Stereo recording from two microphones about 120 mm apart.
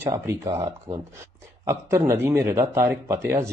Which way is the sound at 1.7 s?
25° right (ahead or behind).